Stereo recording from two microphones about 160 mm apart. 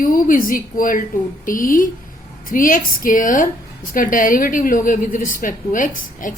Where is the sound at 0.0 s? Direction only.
60° left (ahead or behind).